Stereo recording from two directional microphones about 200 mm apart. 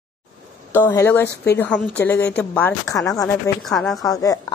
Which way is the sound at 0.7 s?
10° left (ahead or behind).